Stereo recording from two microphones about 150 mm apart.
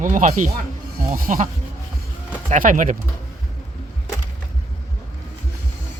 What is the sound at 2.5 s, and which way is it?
Speech, 65° right (ahead or behind).